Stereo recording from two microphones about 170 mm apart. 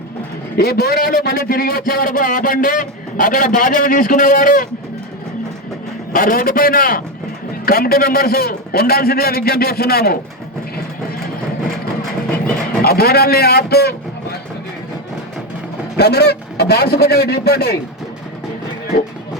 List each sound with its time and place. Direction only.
0.5 s a man's voice: 65° left (ahead or behind)
6.1 s a man's voice: 55° left (ahead or behind)
12.8 s a man's voice: 65° left (ahead or behind)
16.0 s a man's voice: 70° left (ahead or behind)